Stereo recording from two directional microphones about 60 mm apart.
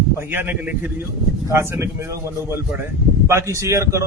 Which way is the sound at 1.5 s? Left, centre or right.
Right.